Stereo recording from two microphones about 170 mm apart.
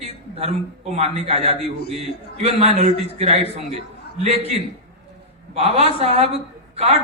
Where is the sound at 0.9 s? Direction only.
35° right (ahead or behind).